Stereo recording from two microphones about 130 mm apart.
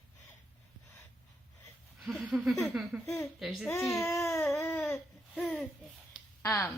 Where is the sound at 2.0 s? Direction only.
Centre (ahead or behind).